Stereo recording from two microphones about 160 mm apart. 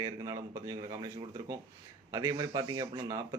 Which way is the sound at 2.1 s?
20° right (ahead or behind).